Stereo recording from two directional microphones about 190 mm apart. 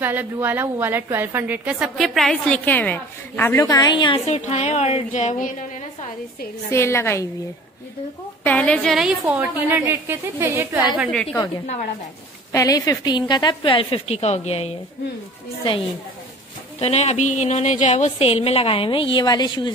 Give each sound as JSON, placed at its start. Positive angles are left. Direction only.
{"t": 0.0, "sound": "a woman's voice", "side_deg": -10}
{"t": 6.7, "sound": "a woman's voice", "side_deg": 15}
{"t": 8.5, "sound": "a woman's voice", "side_deg": 5}
{"t": 11.0, "sound": "a woman's voice", "side_deg": 0}
{"t": 12.5, "sound": "a woman's voice", "side_deg": 20}
{"t": 16.8, "sound": "a woman's voice", "side_deg": 35}